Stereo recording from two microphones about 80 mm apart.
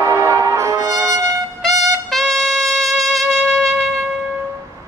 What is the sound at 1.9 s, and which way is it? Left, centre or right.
Trumpet, centre.